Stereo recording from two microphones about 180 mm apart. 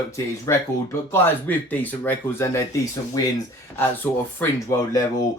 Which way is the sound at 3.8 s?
10° left (ahead or behind).